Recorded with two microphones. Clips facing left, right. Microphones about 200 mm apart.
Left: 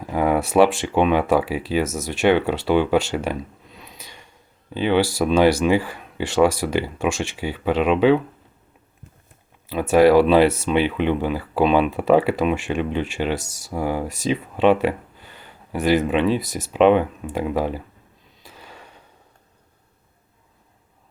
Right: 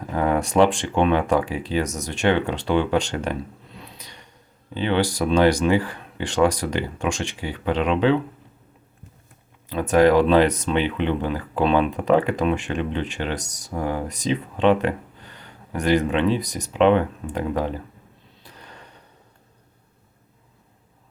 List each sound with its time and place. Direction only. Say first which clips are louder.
0.0 s speech: left 2 dB; 10° left (ahead or behind)
3.9 s a sound: left 1 dB; 10° left (ahead or behind)
4.7 s speech: left 3 dB; 10° left (ahead or behind)
9.6 s speech: left 2 dB; 10° left (ahead or behind)
16.4 s speech: even; 15° right (ahead or behind)
16.7 s speech: left 2 dB; 15° left (ahead or behind)
18.4 s a sound: left 2 dB; 10° left (ahead or behind)